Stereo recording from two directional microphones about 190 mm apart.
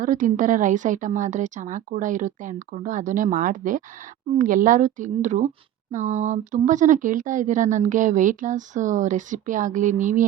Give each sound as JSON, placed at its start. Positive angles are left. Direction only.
{"t": 0.0, "sound": "a woman's voice", "side_deg": -45}